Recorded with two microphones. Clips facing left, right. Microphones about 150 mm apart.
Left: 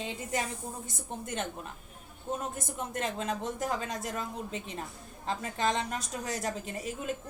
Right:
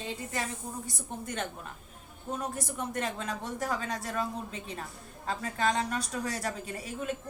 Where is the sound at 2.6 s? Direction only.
25° left (ahead or behind).